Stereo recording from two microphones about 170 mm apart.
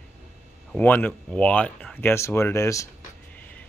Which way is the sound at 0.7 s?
10° left (ahead or behind).